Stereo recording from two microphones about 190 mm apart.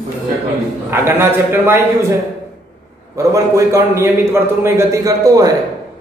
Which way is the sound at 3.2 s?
15° right (ahead or behind).